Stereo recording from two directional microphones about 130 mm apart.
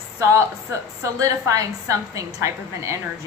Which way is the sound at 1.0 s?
25° right (ahead or behind).